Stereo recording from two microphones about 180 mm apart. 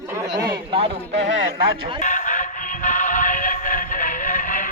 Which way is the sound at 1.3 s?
90° right.